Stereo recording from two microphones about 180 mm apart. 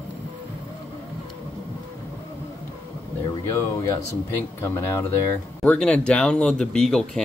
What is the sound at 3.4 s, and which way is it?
Speech, 15° left (ahead or behind).